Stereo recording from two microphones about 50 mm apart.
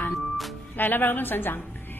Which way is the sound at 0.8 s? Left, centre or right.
Left.